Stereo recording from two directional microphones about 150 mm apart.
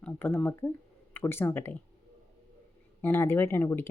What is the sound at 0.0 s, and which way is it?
Speech, 10° left (ahead or behind).